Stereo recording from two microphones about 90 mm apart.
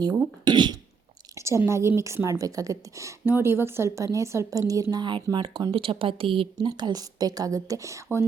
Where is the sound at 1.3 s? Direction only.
30° right (ahead or behind).